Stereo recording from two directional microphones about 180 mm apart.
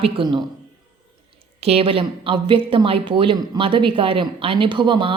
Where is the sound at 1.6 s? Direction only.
35° right (ahead or behind).